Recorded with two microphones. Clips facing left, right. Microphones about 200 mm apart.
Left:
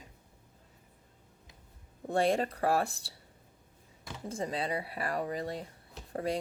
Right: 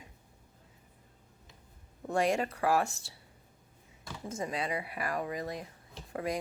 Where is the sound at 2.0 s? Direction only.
35° left (ahead or behind).